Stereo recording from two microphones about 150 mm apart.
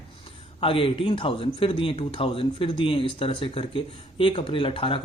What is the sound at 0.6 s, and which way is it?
Speech, 35° left (ahead or behind).